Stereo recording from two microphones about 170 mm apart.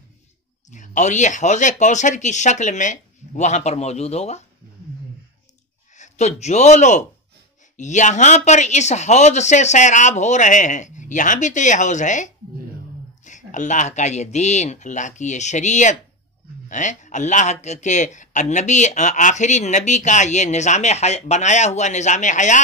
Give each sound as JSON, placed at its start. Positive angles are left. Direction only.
{"t": 0.7, "sound": "a man's voice", "side_deg": 45}
{"t": 5.9, "sound": "a man's voice", "side_deg": 40}